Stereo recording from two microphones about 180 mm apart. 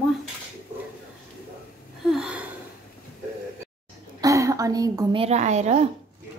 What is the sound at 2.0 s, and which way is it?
Gasp, 5° right (ahead or behind).